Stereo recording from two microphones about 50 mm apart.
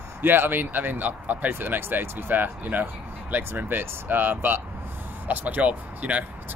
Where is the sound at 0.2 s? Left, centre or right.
Right.